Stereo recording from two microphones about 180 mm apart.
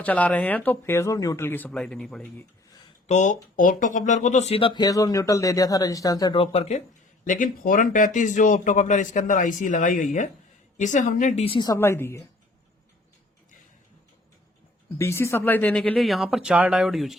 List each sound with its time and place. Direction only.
0.0 s speech: 5° left (ahead or behind)
3.1 s speech: 40° left (ahead or behind)
7.3 s speech: 50° left (ahead or behind); by 11.7 s 30° left (ahead or behind)
11.7 s speech: 15° left (ahead or behind)
14.9 s speech: 15° left (ahead or behind); by 17.2 s centre (ahead or behind)